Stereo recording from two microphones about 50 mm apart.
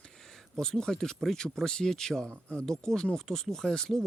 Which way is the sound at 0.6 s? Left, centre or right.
Centre.